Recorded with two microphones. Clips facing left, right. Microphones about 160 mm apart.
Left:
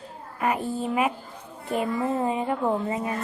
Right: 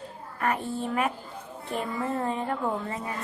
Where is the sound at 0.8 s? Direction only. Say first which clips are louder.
Left 3 dB; 10° left (ahead or behind).